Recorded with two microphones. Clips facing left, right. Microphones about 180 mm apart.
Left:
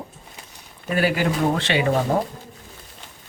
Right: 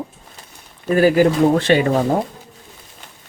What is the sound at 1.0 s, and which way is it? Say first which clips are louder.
Speech: right 8 dB; 45° right (ahead or behind).